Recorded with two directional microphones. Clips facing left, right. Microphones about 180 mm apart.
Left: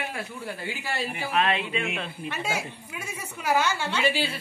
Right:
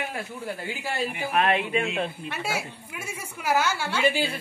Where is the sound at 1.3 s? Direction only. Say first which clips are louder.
Right 2 dB; 50° right (ahead or behind).